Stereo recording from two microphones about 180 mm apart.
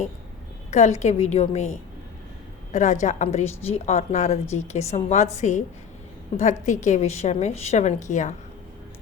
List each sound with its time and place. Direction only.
0.7 s a woman's voice: 40° left (ahead or behind)